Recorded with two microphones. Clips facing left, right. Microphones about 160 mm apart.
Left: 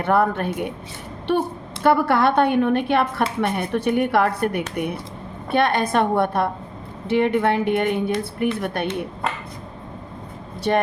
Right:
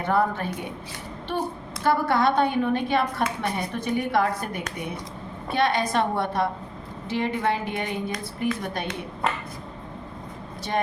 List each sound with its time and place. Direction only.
0.0 s a woman's voice: 60° left (ahead or behind)
10.7 s a woman's voice: 65° left (ahead or behind)